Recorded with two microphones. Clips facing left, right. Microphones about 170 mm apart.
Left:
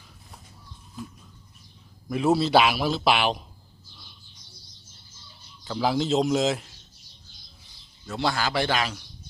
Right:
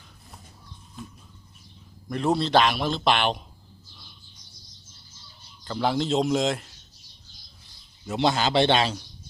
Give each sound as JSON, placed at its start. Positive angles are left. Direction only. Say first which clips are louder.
{"t": 2.0, "sound": "a man's voice", "louder": "left 2 dB", "side_deg": 5}
{"t": 5.6, "sound": "a man's voice", "louder": "even", "side_deg": 0}
{"t": 8.0, "sound": "a man's voice", "louder": "right 3 dB", "side_deg": -20}